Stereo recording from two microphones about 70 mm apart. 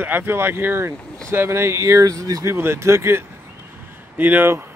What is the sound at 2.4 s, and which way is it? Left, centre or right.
Speech, right.